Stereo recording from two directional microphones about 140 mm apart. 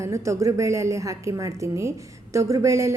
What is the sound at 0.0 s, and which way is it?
A woman's voice, 20° right (ahead or behind).